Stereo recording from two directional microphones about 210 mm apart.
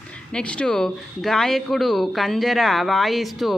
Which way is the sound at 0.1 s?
5° left (ahead or behind).